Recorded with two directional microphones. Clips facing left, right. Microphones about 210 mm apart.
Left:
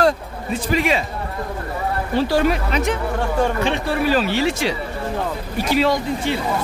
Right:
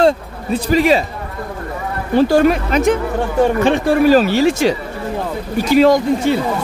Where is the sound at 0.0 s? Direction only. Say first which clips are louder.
Right 4 dB; 35° right (ahead or behind).